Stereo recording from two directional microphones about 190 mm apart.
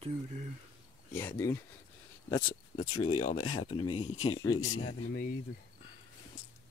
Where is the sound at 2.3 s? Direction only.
25° left (ahead or behind).